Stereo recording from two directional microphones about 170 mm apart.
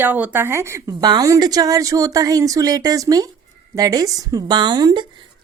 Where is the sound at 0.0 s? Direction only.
10° right (ahead or behind).